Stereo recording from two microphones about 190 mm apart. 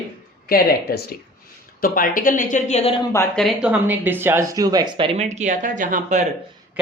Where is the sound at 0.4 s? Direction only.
50° left (ahead or behind); by 2.9 s 35° left (ahead or behind).